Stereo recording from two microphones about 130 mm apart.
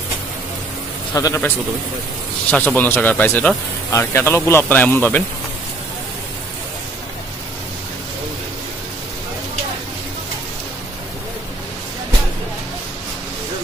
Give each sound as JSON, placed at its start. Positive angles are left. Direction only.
{"t": 1.1, "sound": "a man's voice", "side_deg": 25}
{"t": 2.5, "sound": "speech", "side_deg": 10}